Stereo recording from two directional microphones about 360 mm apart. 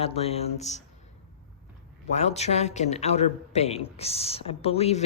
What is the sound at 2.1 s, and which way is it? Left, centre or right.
A woman's voice, centre.